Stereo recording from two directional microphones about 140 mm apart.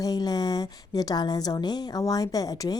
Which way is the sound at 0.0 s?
25° left (ahead or behind).